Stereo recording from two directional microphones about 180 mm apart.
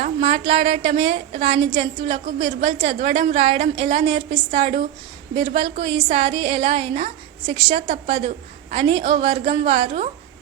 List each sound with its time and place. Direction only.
0.0 s a woman's voice: 35° right (ahead or behind)